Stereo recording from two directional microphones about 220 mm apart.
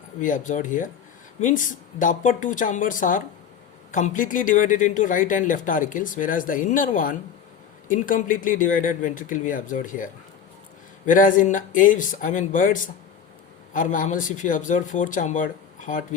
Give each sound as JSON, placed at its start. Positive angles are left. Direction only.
{"t": 0.2, "sound": "speech", "side_deg": 35}